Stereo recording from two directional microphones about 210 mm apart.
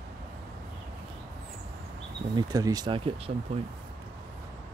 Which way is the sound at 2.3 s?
15° right (ahead or behind).